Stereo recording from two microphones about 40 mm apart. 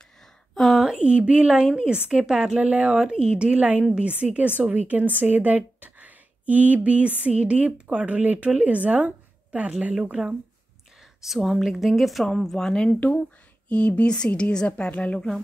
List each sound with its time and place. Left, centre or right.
0.6 s a sound: centre
0.8 s speech: right
2.5 s a woman's voice: right
2.9 s speech: right
3.5 s a woman's voice: right
3.8 s speech: right
4.2 s a woman's voice: right
10.2 s speech: centre
11.2 s a woman's voice: centre; by 15.1 s left